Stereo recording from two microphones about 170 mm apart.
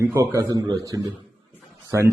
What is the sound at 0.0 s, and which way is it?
A man's voice, 15° right (ahead or behind).